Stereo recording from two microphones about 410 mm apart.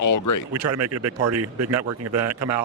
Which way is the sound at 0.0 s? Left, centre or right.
Left.